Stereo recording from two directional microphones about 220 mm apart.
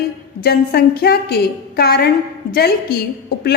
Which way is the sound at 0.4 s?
45° left (ahead or behind).